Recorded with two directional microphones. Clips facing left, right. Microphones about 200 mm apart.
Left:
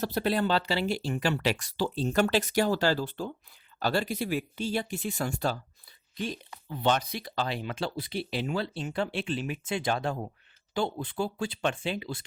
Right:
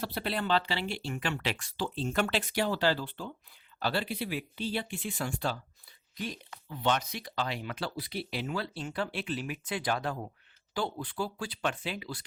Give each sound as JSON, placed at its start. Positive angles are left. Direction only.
{"t": 0.0, "sound": "speech", "side_deg": 45}
{"t": 6.1, "sound": "speech", "side_deg": 30}